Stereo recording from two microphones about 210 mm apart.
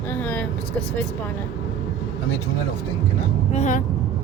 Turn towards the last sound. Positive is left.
turn(degrees=35)  # may be behind; listen again after turning